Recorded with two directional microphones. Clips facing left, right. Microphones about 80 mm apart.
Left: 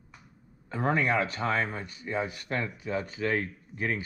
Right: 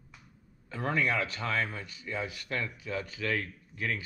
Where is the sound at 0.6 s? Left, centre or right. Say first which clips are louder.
Left 3 dB; left.